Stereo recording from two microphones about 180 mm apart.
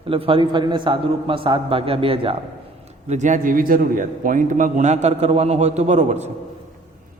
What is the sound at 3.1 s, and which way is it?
A man's voice, 40° right (ahead or behind).